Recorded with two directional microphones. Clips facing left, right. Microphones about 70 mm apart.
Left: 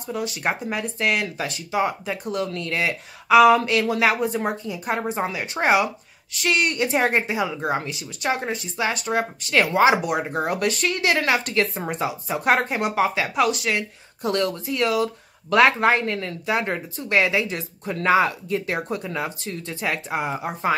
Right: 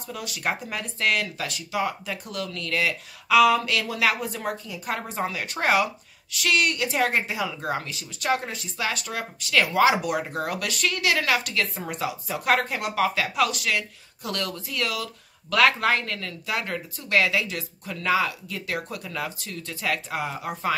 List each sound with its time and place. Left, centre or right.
0.1 s a woman's voice: left
6.3 s a woman's voice: left